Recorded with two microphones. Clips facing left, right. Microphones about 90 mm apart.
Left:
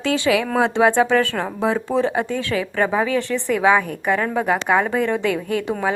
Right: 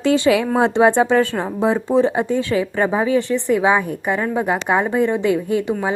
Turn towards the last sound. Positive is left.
turn(degrees=-20)  # may be behind; listen again after turning